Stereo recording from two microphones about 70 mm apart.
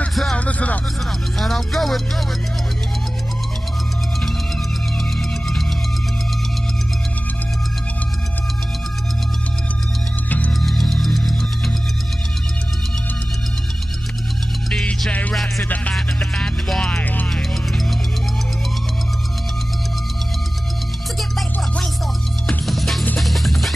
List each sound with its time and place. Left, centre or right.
0.1 s music: centre
0.5 s music: centre
1.4 s speech: centre
10.6 s music: centre
14.7 s music: centre
16.6 s music: centre
17.0 s music: left
17.3 s music: centre
22.7 s music: centre